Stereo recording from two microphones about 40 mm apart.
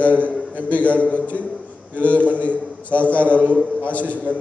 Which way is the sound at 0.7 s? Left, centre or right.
Left.